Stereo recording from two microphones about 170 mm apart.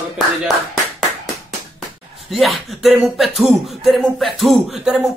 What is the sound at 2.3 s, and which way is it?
Speech, centre (ahead or behind).